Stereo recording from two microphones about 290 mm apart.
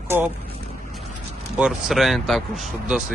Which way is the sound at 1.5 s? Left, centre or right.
Centre.